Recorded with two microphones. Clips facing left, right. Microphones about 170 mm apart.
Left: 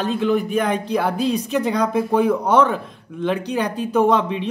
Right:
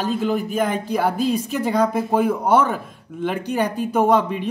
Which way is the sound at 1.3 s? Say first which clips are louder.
Left 1 dB; 5° right (ahead or behind).